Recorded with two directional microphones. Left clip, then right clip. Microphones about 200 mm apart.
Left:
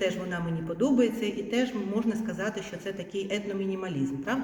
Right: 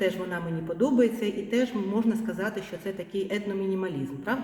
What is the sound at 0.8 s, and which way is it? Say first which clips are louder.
A man's voice: right 2 dB; 30° right (ahead or behind).